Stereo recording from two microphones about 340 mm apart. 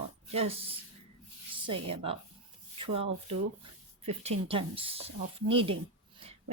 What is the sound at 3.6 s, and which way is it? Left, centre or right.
Speech, centre.